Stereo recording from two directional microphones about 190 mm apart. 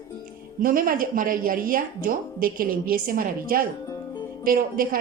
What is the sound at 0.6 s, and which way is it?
A woman's voice, 45° right (ahead or behind).